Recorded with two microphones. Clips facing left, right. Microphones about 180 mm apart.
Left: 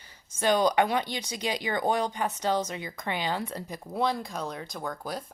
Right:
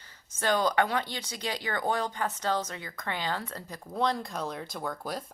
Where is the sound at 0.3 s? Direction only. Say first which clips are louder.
Left 3 dB; 15° left (ahead or behind).